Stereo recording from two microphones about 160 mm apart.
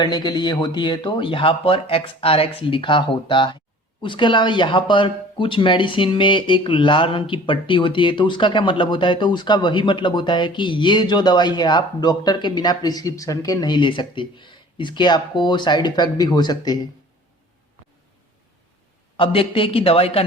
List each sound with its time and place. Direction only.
0.0 s speech: 25° left (ahead or behind)
19.1 s speech: 35° left (ahead or behind)